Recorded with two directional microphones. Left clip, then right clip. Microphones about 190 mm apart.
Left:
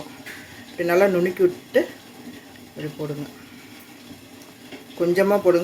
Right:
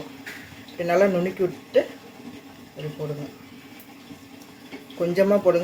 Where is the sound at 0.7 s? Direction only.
25° left (ahead or behind).